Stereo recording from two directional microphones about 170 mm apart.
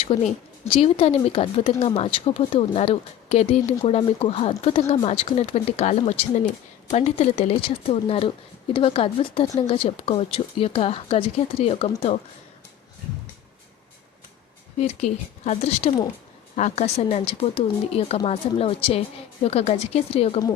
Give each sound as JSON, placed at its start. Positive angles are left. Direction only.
{"t": 0.1, "sound": "a woman's voice", "side_deg": 35}
{"t": 14.8, "sound": "a woman's voice", "side_deg": 40}